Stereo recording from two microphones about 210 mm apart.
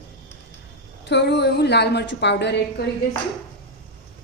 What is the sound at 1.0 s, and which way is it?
A woman's voice, 55° left (ahead or behind).